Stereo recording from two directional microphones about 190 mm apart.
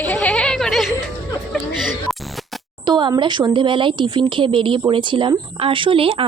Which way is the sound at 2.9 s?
25° right (ahead or behind).